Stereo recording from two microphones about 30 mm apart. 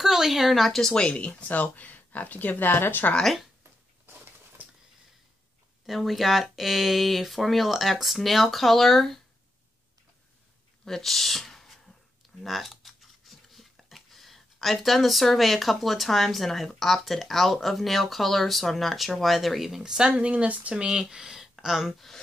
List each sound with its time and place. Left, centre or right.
0.0 s speech: centre
0.9 s speech: left
1.5 s speech: left
5.9 s speech: centre
10.9 s speech: centre
19.8 s speech: right
20.2 s speech: right
20.7 s speech: right
21.4 s a sound: centre